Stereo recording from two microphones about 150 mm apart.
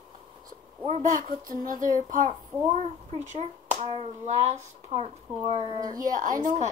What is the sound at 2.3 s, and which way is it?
A child's voice, 45° right (ahead or behind).